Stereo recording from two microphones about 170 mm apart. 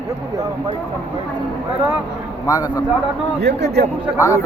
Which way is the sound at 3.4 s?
85° right.